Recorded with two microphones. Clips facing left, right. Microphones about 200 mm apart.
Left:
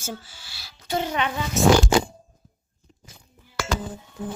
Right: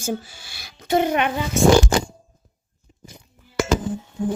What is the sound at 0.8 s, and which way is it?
Speech, 55° right (ahead or behind).